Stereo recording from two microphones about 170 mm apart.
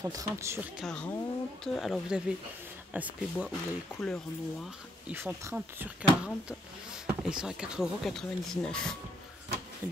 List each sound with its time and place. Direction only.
0.0 s speech: 20° right (ahead or behind)
0.7 s speech: 5° left (ahead or behind)
5.0 s speech: 15° right (ahead or behind); by 8.9 s 5° left (ahead or behind)